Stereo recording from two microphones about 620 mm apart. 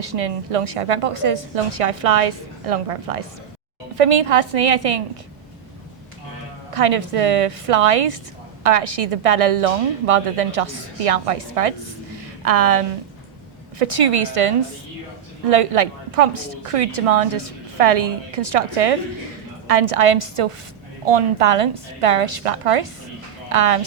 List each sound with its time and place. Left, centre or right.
0.0 s a woman's voice: right
6.7 s a woman's voice: right